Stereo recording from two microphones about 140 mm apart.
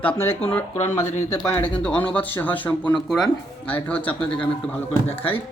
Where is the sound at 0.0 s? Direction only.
15° left (ahead or behind).